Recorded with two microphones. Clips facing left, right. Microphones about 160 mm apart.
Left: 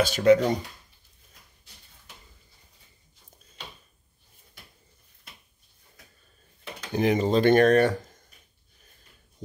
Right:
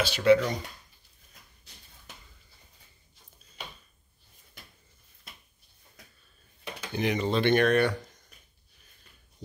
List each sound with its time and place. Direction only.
0.0 s speech: 45° left (ahead or behind)
6.9 s speech: 35° left (ahead or behind)